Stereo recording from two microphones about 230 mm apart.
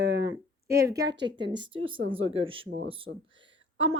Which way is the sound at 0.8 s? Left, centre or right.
Centre.